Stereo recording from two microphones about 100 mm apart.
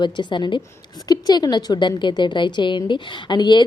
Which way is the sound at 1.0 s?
40° left (ahead or behind).